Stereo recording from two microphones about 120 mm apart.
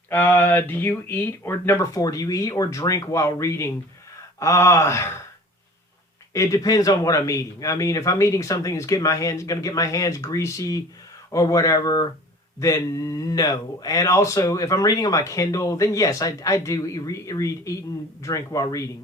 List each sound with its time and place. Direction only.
0.1 s speech: 15° left (ahead or behind)
1.9 s speech: 30° left (ahead or behind)
6.3 s speech: 25° left (ahead or behind)